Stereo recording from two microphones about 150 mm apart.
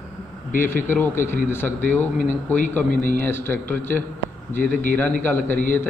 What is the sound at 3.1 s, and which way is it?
Speech, 15° left (ahead or behind).